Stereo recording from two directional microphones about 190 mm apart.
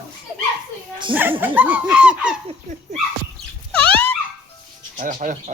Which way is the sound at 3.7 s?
10° left (ahead or behind).